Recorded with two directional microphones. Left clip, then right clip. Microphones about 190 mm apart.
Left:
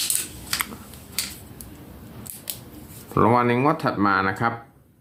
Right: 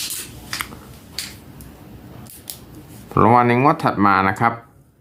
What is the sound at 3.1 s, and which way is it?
Speech, 20° right (ahead or behind).